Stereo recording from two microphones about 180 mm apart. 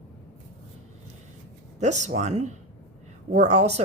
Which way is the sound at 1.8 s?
40° right (ahead or behind).